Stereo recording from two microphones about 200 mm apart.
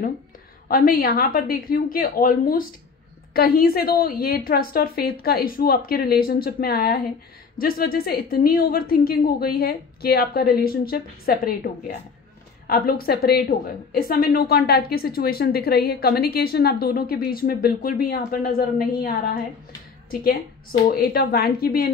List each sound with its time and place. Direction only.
0.7 s a woman's voice: 45° left (ahead or behind)
20.9 s a woman's voice: 50° left (ahead or behind)